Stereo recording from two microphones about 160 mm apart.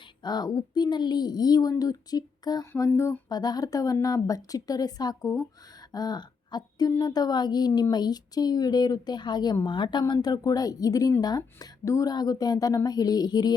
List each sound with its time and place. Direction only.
0.2 s a woman's voice: 25° left (ahead or behind)